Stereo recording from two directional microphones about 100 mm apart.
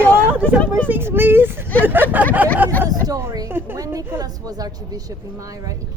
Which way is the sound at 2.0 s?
15° left (ahead or behind).